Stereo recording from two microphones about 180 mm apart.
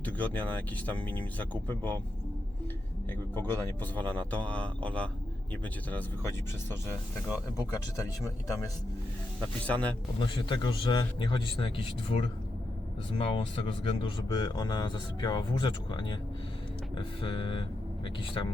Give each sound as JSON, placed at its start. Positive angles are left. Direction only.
{"t": 0.0, "sound": "speech", "side_deg": 10}
{"t": 3.3, "sound": "speech", "side_deg": 10}
{"t": 7.5, "sound": "speech", "side_deg": 15}
{"t": 9.6, "sound": "speech", "side_deg": 5}
{"t": 10.2, "sound": "speech", "side_deg": 25}
{"t": 13.1, "sound": "speech", "side_deg": 30}